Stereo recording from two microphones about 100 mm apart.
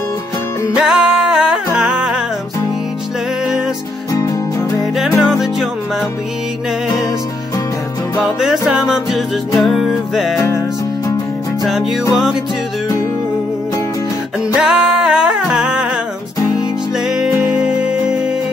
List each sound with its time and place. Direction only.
0.7 s music: 5° right (ahead or behind)
4.9 s music: 5° right (ahead or behind)
8.2 s music: 5° right (ahead or behind)
11.6 s music: 5° right (ahead or behind)
14.5 s music: 5° right (ahead or behind)
17.1 s music: 5° right (ahead or behind)